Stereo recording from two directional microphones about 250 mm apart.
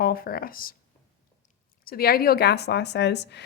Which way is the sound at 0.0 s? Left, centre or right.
Left.